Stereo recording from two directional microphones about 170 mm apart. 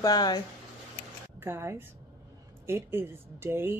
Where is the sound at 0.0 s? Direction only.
25° left (ahead or behind).